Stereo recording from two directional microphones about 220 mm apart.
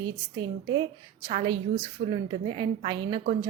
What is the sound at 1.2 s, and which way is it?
A woman's voice, 30° right (ahead or behind).